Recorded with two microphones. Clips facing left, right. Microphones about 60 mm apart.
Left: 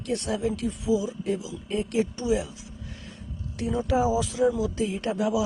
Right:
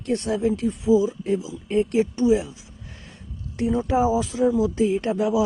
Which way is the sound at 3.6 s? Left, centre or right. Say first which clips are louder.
Right 4 dB; right.